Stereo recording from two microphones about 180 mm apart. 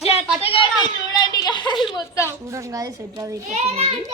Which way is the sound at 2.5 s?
20° right (ahead or behind).